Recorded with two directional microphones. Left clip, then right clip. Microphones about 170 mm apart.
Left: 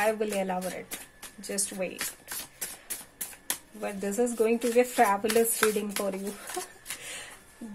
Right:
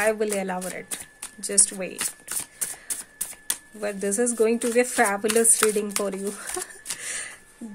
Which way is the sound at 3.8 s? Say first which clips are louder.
Right 4 dB; 30° right (ahead or behind).